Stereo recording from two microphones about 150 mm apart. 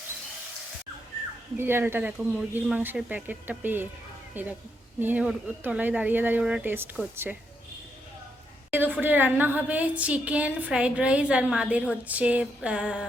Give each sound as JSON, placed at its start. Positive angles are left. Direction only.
{"t": 1.5, "sound": "a woman's voice", "side_deg": -15}
{"t": 8.7, "sound": "a woman's voice", "side_deg": -15}